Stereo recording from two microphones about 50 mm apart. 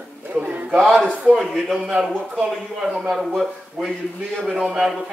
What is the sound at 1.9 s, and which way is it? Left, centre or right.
Speech, centre.